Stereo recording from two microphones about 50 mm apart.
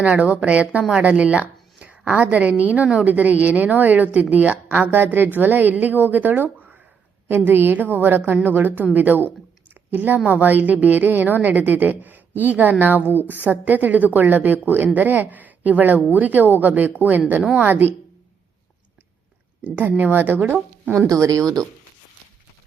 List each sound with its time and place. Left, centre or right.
0.0 s a woman's voice: right
4.9 s a woman's voice: right
19.6 s a woman's voice: right